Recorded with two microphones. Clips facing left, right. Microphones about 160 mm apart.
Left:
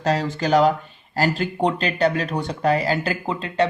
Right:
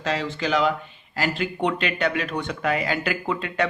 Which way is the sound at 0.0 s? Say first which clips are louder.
Left 4 dB; 40° left (ahead or behind).